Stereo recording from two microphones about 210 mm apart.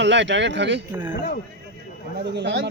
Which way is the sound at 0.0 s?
55° right (ahead or behind).